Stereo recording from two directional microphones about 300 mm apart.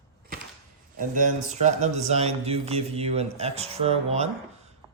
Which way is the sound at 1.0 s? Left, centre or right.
Right.